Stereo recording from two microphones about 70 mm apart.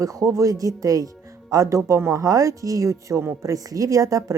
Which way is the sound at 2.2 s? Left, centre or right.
Right.